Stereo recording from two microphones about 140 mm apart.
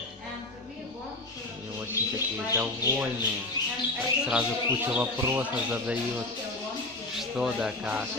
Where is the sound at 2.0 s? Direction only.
20° left (ahead or behind).